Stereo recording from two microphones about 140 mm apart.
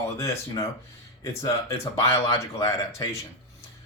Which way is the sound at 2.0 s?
45° left (ahead or behind).